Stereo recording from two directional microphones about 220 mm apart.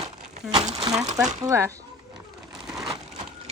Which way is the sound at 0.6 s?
30° right (ahead or behind).